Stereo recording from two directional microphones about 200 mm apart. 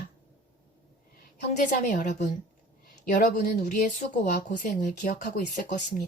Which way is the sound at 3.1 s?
50° left (ahead or behind).